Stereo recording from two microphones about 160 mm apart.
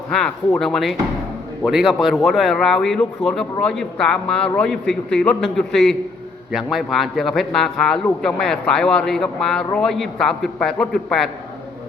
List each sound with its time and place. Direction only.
0.6 s a man's voice: centre (ahead or behind)